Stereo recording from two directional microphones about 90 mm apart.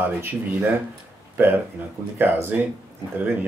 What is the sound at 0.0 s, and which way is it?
Speech, 20° right (ahead or behind).